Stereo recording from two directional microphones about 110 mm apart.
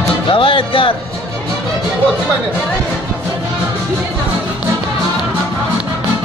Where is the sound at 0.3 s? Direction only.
50° left (ahead or behind).